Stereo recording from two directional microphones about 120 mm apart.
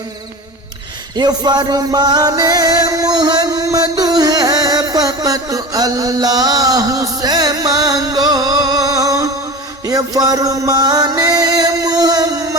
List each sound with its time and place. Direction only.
1.1 s music: 35° right (ahead or behind)